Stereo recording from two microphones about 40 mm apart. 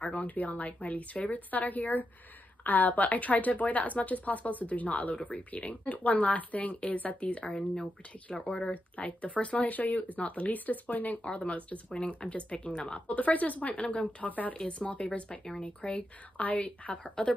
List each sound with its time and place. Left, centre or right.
0.2 s a woman's voice: left
7.4 s speech: left
8.7 s a woman's voice: left
11.2 s speech: left
14.2 s speech: left
14.7 s speech: left